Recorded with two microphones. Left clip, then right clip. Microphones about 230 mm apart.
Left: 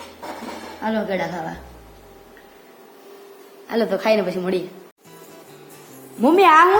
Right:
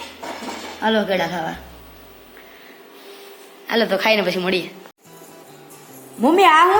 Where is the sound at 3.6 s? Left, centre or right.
Centre.